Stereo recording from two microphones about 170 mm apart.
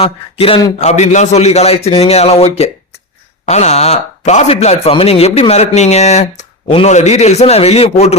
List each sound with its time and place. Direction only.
0.0 s speech: 35° left (ahead or behind)